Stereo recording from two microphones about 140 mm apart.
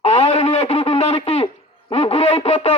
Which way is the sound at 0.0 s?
50° left (ahead or behind).